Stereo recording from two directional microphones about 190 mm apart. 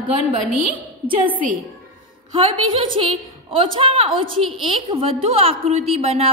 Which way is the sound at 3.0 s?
30° right (ahead or behind).